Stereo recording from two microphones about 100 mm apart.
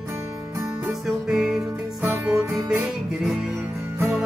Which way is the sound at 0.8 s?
5° right (ahead or behind).